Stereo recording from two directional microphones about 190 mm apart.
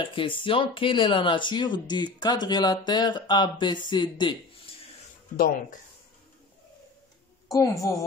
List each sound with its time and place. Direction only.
0.0 s speech: 25° left (ahead or behind)
7.5 s a woman's voice: 15° left (ahead or behind)